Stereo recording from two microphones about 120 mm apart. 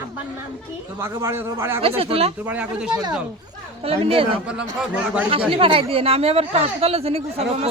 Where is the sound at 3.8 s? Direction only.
55° right (ahead or behind).